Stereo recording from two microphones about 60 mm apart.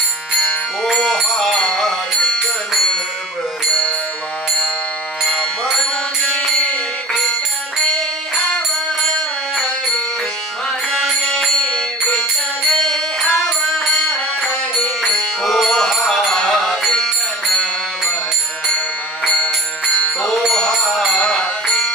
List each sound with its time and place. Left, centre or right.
0.9 s music: centre
5.2 s music: centre
9.6 s music: centre
11.2 s music: centre
19.2 s music: left
20.7 s a sound: centre
21.2 s music: centre